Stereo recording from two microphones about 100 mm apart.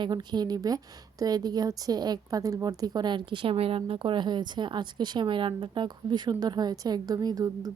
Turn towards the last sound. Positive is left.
turn(degrees=-40)  # may be behind; listen again after turning